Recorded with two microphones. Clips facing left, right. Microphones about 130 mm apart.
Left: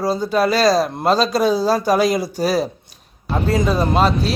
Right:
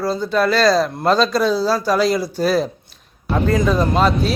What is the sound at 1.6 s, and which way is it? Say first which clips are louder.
Speech: left 1 dB; 45° left (ahead or behind).